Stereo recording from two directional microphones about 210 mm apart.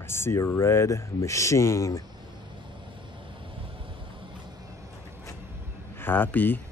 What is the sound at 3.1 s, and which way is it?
Vehicle, 25° right (ahead or behind).